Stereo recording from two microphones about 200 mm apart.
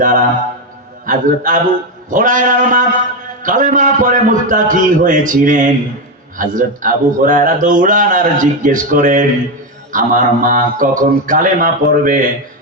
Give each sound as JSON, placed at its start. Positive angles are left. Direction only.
{"t": 0.0, "sound": "a man's voice", "side_deg": -40}